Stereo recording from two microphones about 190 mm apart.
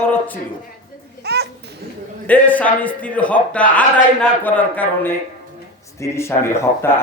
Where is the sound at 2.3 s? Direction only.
10° left (ahead or behind).